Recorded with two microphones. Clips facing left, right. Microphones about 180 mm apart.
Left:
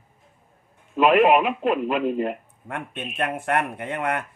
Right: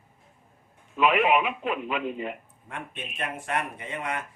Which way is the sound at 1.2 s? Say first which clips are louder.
Left 6 dB; 40° left (ahead or behind).